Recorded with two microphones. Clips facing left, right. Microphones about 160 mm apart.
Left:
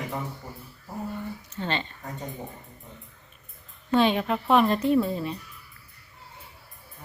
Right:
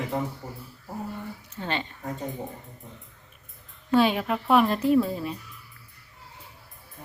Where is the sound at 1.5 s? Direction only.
10° right (ahead or behind).